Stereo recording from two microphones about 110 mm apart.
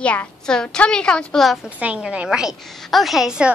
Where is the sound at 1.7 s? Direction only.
15° right (ahead or behind).